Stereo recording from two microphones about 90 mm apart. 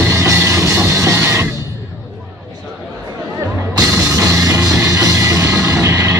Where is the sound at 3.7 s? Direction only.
35° right (ahead or behind).